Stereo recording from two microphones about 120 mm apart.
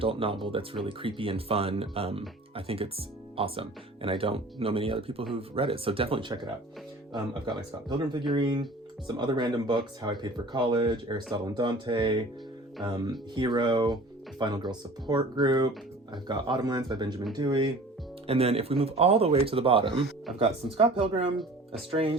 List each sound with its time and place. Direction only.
0.0 s speech: 50° right (ahead or behind)
18.3 s speech: 55° right (ahead or behind)
21.3 s speech: centre (ahead or behind)
21.8 s speech: 55° right (ahead or behind)